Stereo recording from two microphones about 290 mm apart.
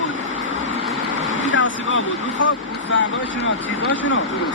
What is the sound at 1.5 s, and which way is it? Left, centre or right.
Vehicle, left.